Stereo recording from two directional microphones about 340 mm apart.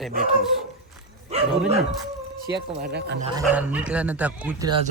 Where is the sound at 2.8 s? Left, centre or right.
Right.